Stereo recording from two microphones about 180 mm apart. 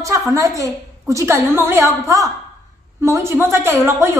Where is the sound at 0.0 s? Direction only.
20° right (ahead or behind).